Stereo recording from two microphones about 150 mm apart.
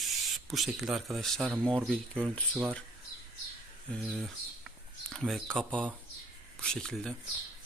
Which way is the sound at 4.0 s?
Centre (ahead or behind).